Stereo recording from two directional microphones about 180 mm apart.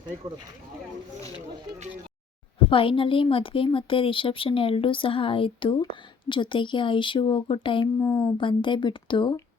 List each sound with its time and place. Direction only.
2.6 s a woman's voice: 30° left (ahead or behind)
8.0 s speech: 10° left (ahead or behind)
8.4 s a woman's voice: 25° left (ahead or behind)